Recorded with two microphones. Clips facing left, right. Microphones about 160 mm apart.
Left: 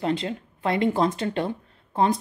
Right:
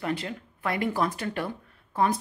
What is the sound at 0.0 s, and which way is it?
Speech, 25° left (ahead or behind).